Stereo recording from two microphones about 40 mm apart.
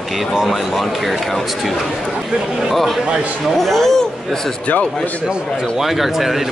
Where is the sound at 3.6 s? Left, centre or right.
Centre.